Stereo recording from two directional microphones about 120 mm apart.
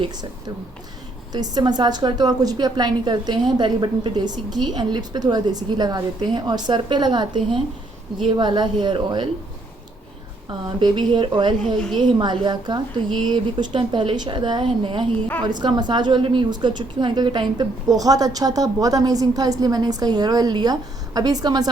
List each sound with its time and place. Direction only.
1.3 s a woman's voice: 35° right (ahead or behind)
10.8 s a woman's voice: 40° right (ahead or behind)